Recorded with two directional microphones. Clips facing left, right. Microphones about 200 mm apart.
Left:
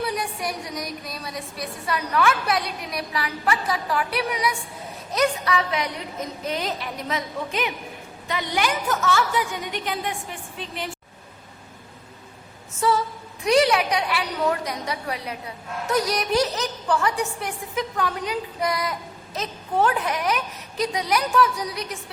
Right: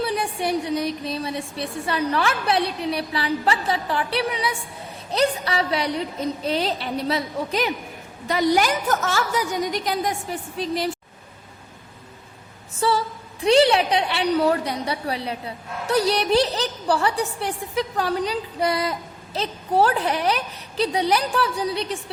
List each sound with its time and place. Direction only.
0.0 s a woman's voice: 30° right (ahead or behind)
12.8 s a woman's voice: 30° right (ahead or behind)